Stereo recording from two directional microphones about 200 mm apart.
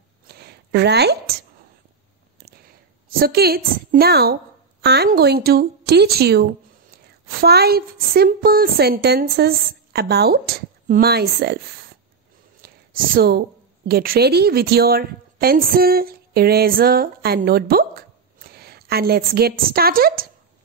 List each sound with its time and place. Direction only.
0.3 s a sound: 55° right (ahead or behind)
3.1 s a woman's voice: 50° right (ahead or behind)
12.6 s a woman's voice: 50° right (ahead or behind)